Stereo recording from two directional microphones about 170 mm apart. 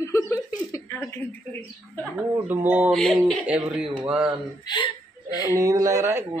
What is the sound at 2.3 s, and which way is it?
Speech, 10° right (ahead or behind).